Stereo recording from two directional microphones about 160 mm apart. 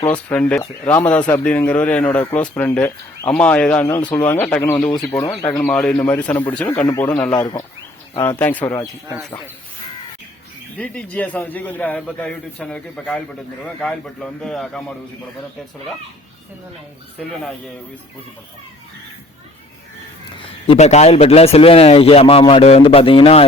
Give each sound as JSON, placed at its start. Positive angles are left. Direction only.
{"t": 0.1, "sound": "a man's voice", "side_deg": 10}
{"t": 3.8, "sound": "a man's voice", "side_deg": 20}
{"t": 6.8, "sound": "a man's voice", "side_deg": 20}
{"t": 7.3, "sound": "speech", "side_deg": 25}
{"t": 8.4, "sound": "a man's voice", "side_deg": 10}
{"t": 10.8, "sound": "a man's voice", "side_deg": 10}
{"t": 20.7, "sound": "a man's voice", "side_deg": 45}